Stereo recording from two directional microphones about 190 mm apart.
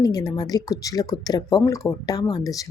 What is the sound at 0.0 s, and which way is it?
Speech, 20° left (ahead or behind).